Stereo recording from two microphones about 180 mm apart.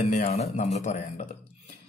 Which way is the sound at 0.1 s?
35° left (ahead or behind).